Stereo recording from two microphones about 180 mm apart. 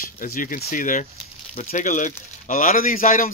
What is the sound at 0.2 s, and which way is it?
Speech, 50° left (ahead or behind).